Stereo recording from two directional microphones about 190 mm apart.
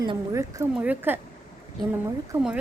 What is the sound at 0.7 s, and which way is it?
Speech, 10° right (ahead or behind).